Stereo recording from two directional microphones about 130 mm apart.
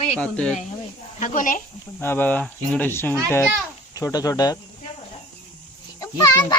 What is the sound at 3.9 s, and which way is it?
Speech, 30° left (ahead or behind).